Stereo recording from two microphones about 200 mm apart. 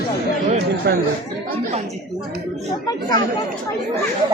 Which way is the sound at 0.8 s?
55° right (ahead or behind).